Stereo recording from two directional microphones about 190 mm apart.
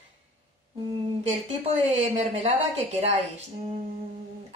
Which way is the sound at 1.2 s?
35° right (ahead or behind).